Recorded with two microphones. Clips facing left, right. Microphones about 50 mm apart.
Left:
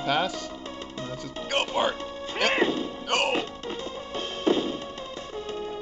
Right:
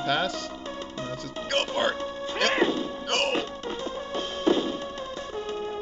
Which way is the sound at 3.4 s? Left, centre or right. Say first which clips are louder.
Right 1 dB; left.